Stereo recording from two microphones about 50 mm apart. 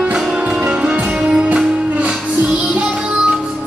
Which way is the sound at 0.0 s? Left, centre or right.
Centre.